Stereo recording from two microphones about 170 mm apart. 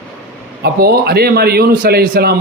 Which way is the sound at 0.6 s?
65° right (ahead or behind).